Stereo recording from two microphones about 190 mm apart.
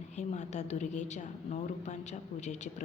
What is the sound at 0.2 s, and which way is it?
A woman's voice, 35° left (ahead or behind).